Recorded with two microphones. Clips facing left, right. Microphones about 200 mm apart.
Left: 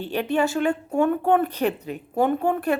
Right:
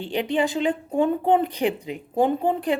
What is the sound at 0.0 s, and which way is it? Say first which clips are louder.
Speech: even; 15° right (ahead or behind).